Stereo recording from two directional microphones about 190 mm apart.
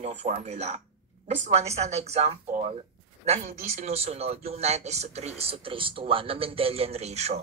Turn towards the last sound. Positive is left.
turn(degrees=-35)  # may be behind; listen again after turning